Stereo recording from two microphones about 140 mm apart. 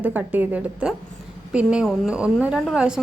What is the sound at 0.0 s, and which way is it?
A woman's voice, 10° right (ahead or behind).